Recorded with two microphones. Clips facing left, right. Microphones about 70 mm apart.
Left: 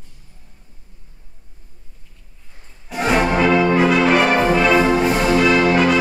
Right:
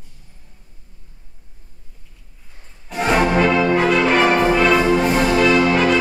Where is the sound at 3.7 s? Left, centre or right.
Centre.